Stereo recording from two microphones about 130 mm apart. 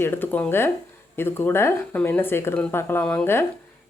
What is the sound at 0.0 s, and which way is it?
Speech, 15° left (ahead or behind).